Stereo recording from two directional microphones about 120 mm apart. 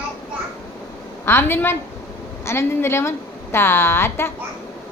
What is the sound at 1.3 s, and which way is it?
A woman's voice, 20° left (ahead or behind).